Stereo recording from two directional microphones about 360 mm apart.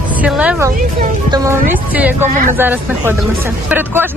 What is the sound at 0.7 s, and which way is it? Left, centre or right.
Speech, right.